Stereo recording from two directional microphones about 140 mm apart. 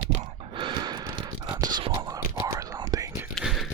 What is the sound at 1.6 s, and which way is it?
Whispering, 30° right (ahead or behind).